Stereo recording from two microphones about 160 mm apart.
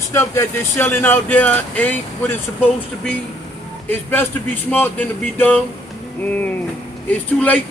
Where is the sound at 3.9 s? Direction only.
10° left (ahead or behind).